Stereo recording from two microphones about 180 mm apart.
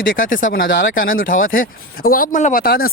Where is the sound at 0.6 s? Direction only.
90° left.